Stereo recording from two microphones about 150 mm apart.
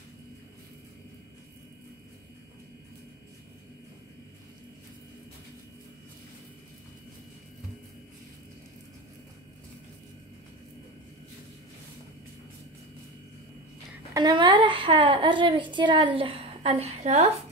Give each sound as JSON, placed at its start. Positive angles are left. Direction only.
{"t": 14.1, "sound": "a woman's voice", "side_deg": -30}